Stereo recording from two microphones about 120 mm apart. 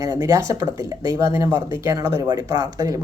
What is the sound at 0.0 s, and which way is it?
A man's voice, 30° right (ahead or behind).